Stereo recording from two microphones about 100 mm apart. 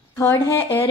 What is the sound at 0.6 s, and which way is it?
Speech, 20° left (ahead or behind).